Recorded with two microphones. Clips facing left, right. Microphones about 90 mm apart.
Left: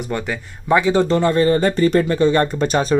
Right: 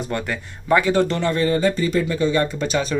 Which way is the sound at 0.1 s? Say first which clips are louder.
Left 2 dB; 10° left (ahead or behind).